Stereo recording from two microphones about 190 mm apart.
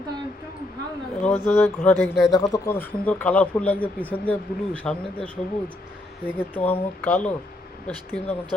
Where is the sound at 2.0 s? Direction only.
Centre (ahead or behind).